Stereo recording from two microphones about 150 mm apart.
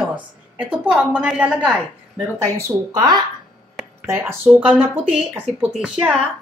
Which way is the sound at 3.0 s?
25° right (ahead or behind).